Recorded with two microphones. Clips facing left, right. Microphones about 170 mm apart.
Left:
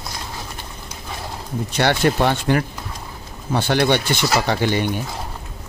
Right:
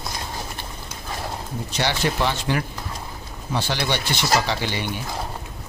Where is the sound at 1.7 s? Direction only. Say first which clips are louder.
Left 6 dB; 55° left (ahead or behind).